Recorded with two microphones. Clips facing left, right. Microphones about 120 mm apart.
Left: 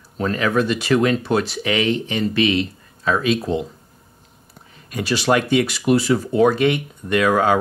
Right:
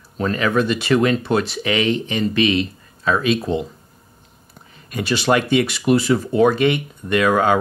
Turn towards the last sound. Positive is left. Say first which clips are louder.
# even
turn(degrees=0)  # may be behind; listen again after turning